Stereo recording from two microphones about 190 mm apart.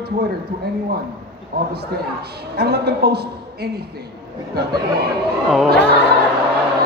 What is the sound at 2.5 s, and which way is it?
A woman's voice, 55° right (ahead or behind).